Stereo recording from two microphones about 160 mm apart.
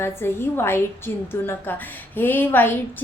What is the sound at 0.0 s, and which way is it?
A woman's voice, 15° left (ahead or behind).